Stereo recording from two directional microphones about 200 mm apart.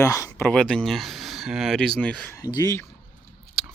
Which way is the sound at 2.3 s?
20° left (ahead or behind).